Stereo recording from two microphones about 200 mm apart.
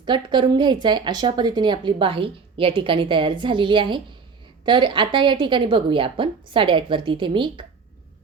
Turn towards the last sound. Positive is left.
turn(degrees=-25)  # may be behind; listen again after turning